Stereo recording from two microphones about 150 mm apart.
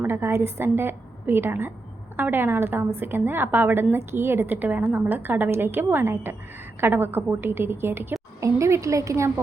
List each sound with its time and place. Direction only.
0.0 s a woman's voice: 15° right (ahead or behind)